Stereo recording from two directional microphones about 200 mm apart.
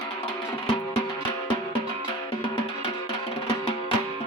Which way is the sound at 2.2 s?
25° left (ahead or behind).